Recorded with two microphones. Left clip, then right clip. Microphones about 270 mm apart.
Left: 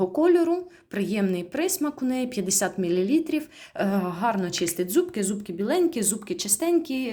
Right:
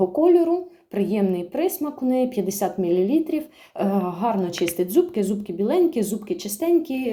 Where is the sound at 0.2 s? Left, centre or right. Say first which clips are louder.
Right 3 dB; left.